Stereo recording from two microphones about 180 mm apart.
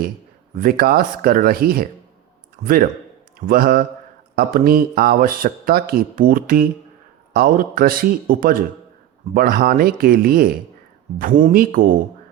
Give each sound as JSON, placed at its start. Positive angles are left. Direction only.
{"t": 0.6, "sound": "speech", "side_deg": -55}
{"t": 11.5, "sound": "speech", "side_deg": -50}